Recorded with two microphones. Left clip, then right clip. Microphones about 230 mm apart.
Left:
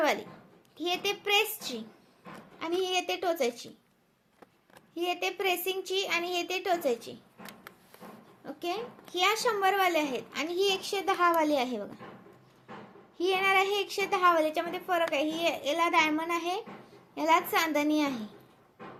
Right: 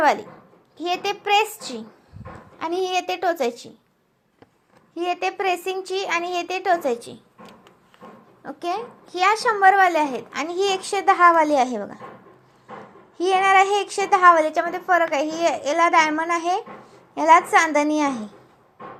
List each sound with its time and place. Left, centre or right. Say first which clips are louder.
0.0 s a child's voice: right 9 dB; centre
4.9 s a child's voice: right 7 dB; centre
8.4 s a child's voice: right 8 dB; centre
13.1 s a child's voice: right 10 dB; centre